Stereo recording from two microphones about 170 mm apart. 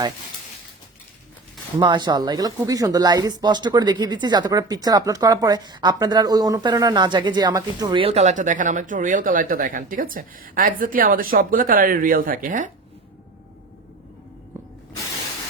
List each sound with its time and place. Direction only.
1.8 s speech: 25° right (ahead or behind)
8.0 s speech: 40° right (ahead or behind)